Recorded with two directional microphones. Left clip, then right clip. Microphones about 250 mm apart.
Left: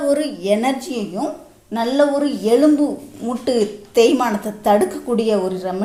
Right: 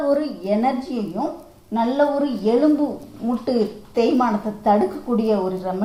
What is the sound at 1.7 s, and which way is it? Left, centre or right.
Speech, left.